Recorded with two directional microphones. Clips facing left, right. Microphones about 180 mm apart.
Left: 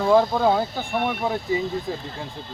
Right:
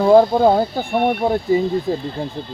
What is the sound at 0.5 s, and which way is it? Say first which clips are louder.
Speech: right 6 dB; 30° right (ahead or behind).